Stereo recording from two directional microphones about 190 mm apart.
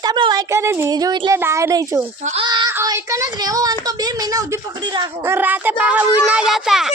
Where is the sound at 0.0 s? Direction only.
20° right (ahead or behind).